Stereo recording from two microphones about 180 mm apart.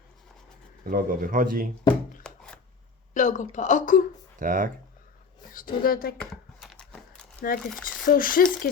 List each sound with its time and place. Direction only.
0.9 s speech: 50° right (ahead or behind)
2.2 s a sound: 5° left (ahead or behind)
3.2 s a woman's voice: 45° left (ahead or behind)
4.4 s speech: 45° right (ahead or behind)
5.5 s speech: 50° left (ahead or behind)
6.6 s a sound: centre (ahead or behind)
7.5 s speech: 50° left (ahead or behind)